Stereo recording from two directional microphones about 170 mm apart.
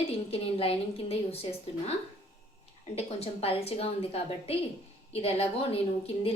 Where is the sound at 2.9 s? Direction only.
35° left (ahead or behind).